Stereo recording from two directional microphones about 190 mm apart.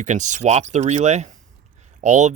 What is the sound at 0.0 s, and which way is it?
Speech, 40° right (ahead or behind).